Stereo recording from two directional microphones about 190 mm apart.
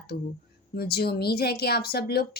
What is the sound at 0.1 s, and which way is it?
Speech, 45° left (ahead or behind).